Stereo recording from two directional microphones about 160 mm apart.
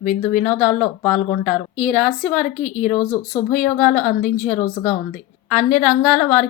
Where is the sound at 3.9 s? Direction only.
5° left (ahead or behind).